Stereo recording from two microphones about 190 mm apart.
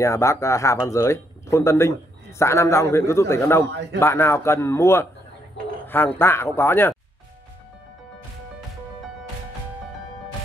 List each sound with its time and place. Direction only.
0.0 s speech: 15° left (ahead or behind)
3.7 s a man's voice: 65° right (ahead or behind)
4.0 s speech: 15° left (ahead or behind)